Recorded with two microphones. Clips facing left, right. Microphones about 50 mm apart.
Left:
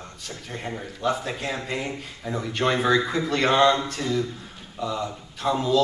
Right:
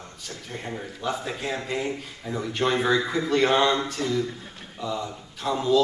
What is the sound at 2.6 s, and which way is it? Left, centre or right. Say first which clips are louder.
Speech: left 1 dB; centre.